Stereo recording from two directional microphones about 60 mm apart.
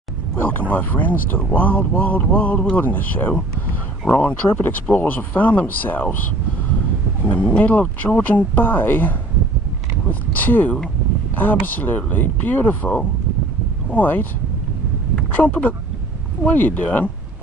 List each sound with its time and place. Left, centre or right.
0.4 s speech: left
7.2 s speech: left